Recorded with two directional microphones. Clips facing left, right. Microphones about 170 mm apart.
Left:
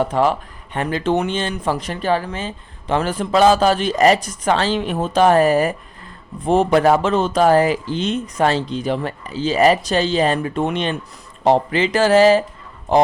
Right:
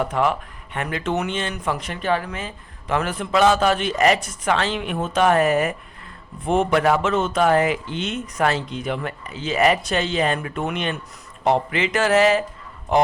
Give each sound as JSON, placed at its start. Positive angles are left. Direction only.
{"t": 0.0, "sound": "speech", "side_deg": 30}